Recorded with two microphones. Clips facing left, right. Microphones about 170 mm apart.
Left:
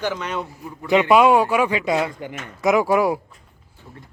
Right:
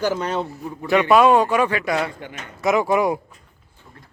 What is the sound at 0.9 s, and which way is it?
A man's voice, 15° left (ahead or behind).